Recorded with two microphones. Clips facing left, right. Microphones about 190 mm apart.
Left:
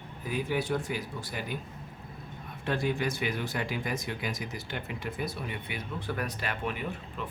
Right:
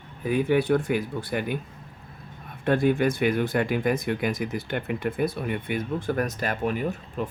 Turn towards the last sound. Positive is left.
turn(degrees=-45)  # may be behind; listen again after turning